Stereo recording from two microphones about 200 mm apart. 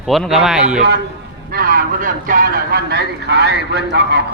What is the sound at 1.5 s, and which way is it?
A man's voice, 45° right (ahead or behind).